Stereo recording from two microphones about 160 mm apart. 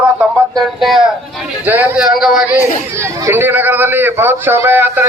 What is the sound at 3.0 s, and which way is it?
A man's voice, 15° right (ahead or behind).